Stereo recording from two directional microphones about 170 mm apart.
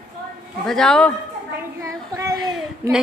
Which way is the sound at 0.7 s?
5° left (ahead or behind).